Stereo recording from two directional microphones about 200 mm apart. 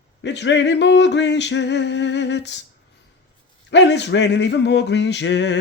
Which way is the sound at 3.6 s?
60° left (ahead or behind).